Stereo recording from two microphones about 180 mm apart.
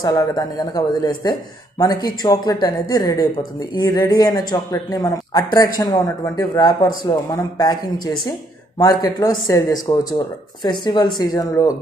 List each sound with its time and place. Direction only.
0.0 s speech: 20° left (ahead or behind)